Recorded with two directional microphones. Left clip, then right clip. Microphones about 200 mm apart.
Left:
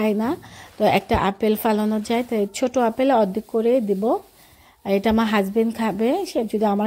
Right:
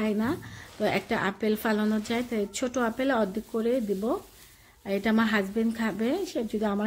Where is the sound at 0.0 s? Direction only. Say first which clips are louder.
Left 7 dB; 30° left (ahead or behind).